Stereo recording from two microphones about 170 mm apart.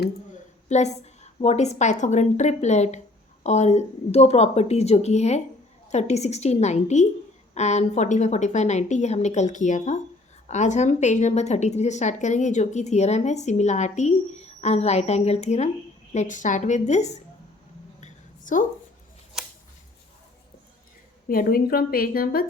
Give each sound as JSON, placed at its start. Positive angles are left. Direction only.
{"t": 0.7, "sound": "a woman's voice", "side_deg": 40}
{"t": 18.0, "sound": "a sound", "side_deg": 50}
{"t": 21.2, "sound": "speech", "side_deg": 60}